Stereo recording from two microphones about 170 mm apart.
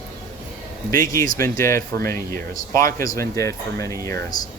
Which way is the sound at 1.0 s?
20° left (ahead or behind).